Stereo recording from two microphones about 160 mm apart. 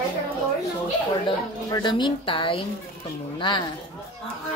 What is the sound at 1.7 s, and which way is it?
A woman's voice, 30° left (ahead or behind).